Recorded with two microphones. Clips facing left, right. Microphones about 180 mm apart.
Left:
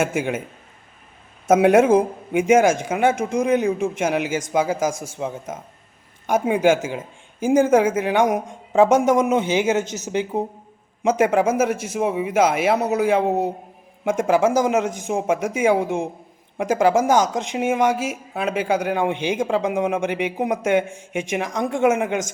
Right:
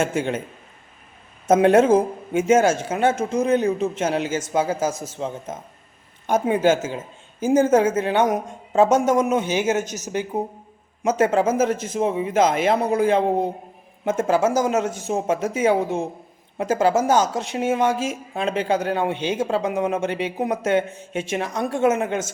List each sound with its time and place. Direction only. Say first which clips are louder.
0.0 s speech: even; 10° left (ahead or behind)
1.5 s speech: left 1 dB; 10° left (ahead or behind)